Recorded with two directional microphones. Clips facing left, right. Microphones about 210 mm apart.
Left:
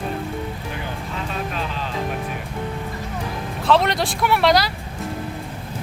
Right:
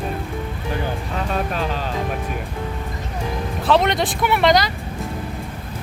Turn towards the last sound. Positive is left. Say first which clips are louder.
# right 1 dB
turn(degrees=0)  # may be behind; listen again after turning